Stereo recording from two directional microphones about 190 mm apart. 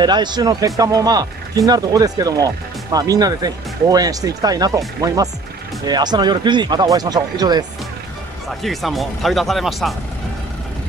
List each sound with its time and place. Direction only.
0.0 s speech: 20° right (ahead or behind)
8.5 s speech: centre (ahead or behind)